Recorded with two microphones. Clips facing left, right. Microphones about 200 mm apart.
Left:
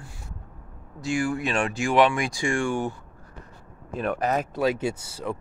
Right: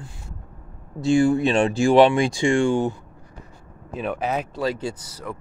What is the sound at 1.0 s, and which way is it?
Speech, 25° right (ahead or behind).